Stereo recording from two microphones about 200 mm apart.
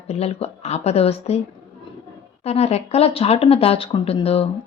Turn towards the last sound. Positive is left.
turn(degrees=30)  # may be behind; listen again after turning